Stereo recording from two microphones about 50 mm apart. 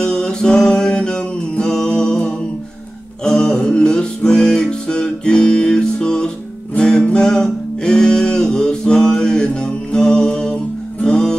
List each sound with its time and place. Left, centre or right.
0.0 s music: centre